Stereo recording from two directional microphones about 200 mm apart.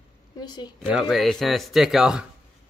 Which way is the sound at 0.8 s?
5° right (ahead or behind).